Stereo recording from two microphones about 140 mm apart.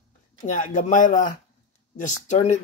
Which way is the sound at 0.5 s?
65° left (ahead or behind).